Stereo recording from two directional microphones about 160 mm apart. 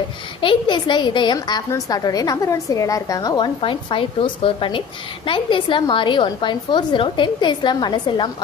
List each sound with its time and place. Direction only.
0.4 s a woman's voice: 30° left (ahead or behind)